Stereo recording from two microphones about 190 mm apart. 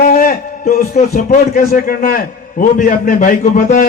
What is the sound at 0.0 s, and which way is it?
A man's voice, 45° left (ahead or behind).